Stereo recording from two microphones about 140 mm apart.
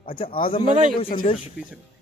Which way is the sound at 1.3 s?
50° left (ahead or behind).